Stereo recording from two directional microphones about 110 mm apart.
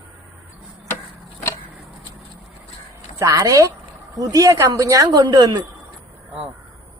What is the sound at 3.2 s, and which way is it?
Speech, 30° right (ahead or behind).